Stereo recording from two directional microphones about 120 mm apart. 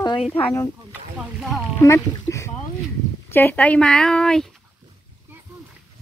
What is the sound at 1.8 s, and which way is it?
Speech, 25° left (ahead or behind).